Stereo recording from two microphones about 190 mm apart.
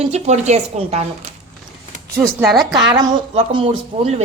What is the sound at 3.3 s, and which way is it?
Speech, 30° right (ahead or behind).